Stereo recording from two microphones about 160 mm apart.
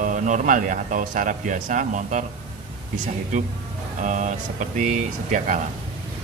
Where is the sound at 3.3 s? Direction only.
50° right (ahead or behind).